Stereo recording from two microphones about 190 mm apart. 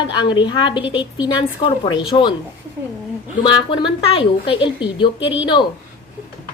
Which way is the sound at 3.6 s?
25° left (ahead or behind).